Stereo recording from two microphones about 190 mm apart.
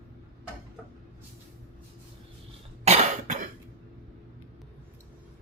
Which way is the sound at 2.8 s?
35° right (ahead or behind).